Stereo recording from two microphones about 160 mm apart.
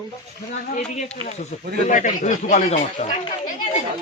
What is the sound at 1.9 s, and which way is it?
Speech, 50° left (ahead or behind).